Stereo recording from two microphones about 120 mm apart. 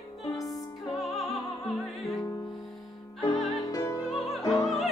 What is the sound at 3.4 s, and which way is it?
Music, centre (ahead or behind).